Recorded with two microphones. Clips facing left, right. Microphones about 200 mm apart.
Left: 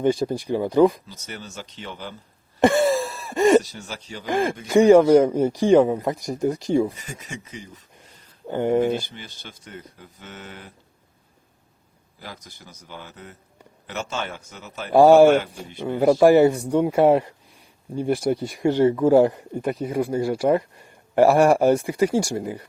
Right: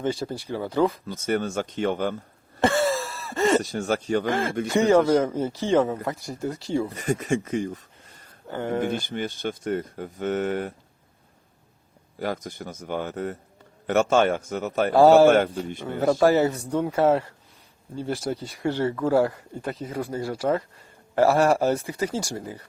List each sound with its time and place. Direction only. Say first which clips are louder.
0.0 s speech: left 6 dB; 15° left (ahead or behind)
1.0 s speech: right 13 dB; 55° right (ahead or behind)
2.6 s groan: left 4 dB; 15° left (ahead or behind)
3.6 s speech: right 11 dB; 50° right (ahead or behind)
4.3 s speech: left 2 dB; 15° left (ahead or behind)
6.9 s speech: right 13 dB; 55° right (ahead or behind)
8.4 s speech: left 6 dB; 15° left (ahead or behind)
9.0 s speech: right 13 dB; 50° right (ahead or behind)
12.2 s speech: right 12 dB; 50° right (ahead or behind)
14.9 s speech: left 2 dB; 15° left (ahead or behind)